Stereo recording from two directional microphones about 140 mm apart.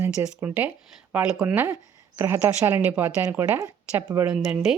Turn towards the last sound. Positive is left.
turn(degrees=0)  # may be behind; listen again after turning